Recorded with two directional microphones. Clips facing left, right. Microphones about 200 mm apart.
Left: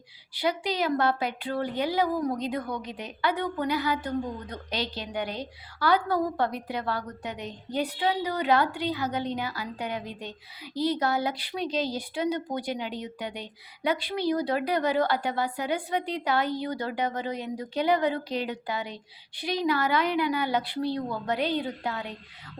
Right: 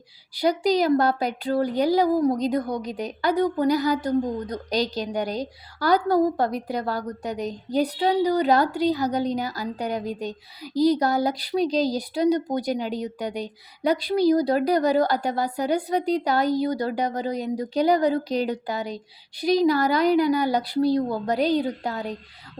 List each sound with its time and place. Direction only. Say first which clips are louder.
0.3 s a woman's voice: right 7 dB; 40° right (ahead or behind)